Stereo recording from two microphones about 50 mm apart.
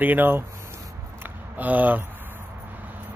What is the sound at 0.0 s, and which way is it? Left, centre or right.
Speech, right.